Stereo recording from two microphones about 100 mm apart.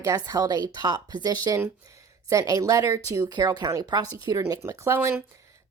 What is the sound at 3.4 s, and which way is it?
Speech, 45° right (ahead or behind).